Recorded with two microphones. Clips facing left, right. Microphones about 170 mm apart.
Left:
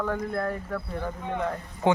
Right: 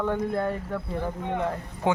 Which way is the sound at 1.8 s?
5° right (ahead or behind).